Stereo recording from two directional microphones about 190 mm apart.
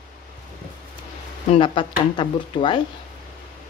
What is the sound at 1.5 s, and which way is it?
A woman's voice, 25° left (ahead or behind).